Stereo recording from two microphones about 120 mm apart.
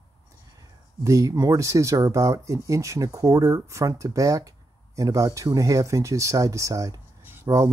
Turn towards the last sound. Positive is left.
turn(degrees=-25)  # may be behind; listen again after turning